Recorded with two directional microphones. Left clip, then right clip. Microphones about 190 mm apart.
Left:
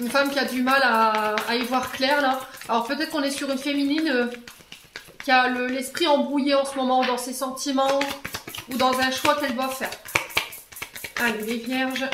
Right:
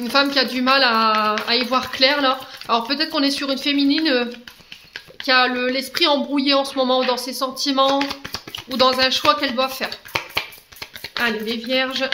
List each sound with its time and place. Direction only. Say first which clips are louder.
0.1 s speech: right 5 dB; 35° right (ahead or behind)
5.2 s speech: right 3 dB; 35° right (ahead or behind)